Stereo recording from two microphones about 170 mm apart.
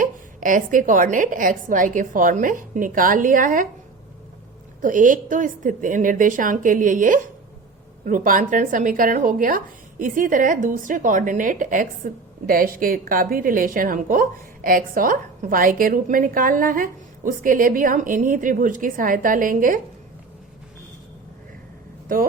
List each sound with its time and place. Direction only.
0.0 s speech: 50° right (ahead or behind)
4.8 s speech: 50° right (ahead or behind)
22.1 s speech: 55° right (ahead or behind)